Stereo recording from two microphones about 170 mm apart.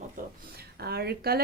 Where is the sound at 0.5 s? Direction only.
70° right (ahead or behind).